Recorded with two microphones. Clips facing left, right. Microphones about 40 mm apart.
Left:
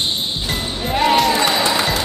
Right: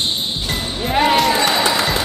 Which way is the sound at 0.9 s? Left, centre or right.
Centre.